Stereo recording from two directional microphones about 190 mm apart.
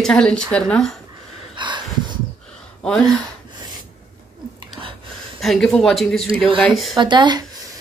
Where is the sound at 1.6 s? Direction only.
25° right (ahead or behind).